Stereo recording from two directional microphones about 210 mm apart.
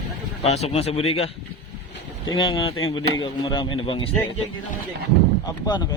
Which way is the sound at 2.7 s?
70° left (ahead or behind).